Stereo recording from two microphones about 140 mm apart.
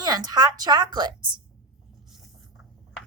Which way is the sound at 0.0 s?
30° right (ahead or behind).